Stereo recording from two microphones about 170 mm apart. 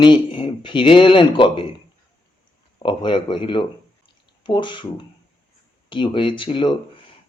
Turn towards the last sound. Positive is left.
turn(degrees=30)  # may be behind; listen again after turning